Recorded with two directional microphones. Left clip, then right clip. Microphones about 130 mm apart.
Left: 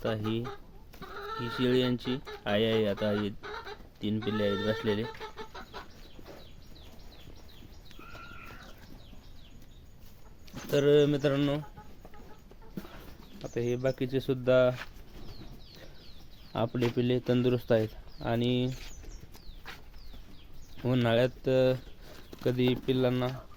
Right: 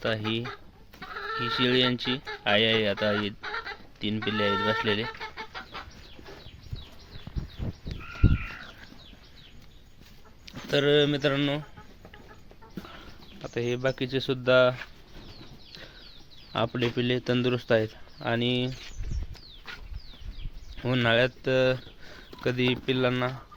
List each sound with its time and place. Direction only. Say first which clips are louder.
0.0 s speech: right 4 dB; 20° left (ahead or behind)
0.9 s chicken: right 5 dB; 80° left
1.4 s speech: right 5 dB; 20° left (ahead or behind)
10.4 s speech: right 2 dB; 20° left (ahead or behind)
13.5 s speech: right 2 dB; 15° left (ahead or behind)
16.5 s speech: right 3 dB; 20° left (ahead or behind)
20.8 s speech: right 3 dB; 25° left (ahead or behind)